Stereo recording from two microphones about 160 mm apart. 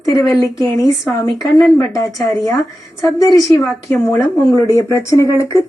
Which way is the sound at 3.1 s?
20° left (ahead or behind).